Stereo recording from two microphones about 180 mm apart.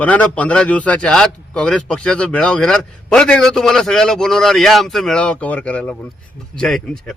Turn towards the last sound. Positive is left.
turn(degrees=0)  # may be behind; listen again after turning